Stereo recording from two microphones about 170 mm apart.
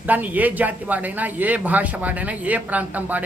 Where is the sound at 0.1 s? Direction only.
10° right (ahead or behind).